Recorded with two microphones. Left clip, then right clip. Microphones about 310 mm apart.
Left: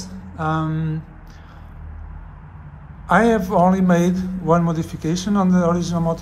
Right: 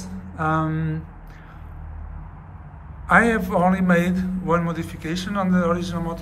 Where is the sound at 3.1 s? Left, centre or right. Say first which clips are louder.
Left 1 dB; centre.